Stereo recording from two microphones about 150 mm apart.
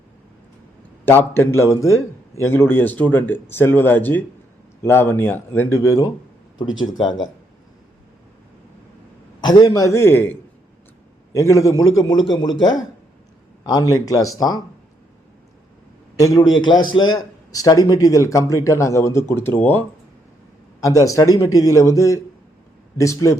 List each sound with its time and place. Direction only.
1.0 s speech: 15° left (ahead or behind)
9.4 s a man's voice: 30° left (ahead or behind)
11.3 s a man's voice: 20° left (ahead or behind)
16.1 s a man's voice: 25° left (ahead or behind)
20.8 s a man's voice: 20° left (ahead or behind)